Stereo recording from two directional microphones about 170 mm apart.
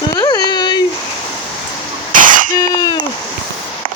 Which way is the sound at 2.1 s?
50° right (ahead or behind).